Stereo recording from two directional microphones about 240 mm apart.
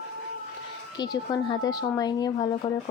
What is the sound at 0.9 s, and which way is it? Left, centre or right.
Speech, centre.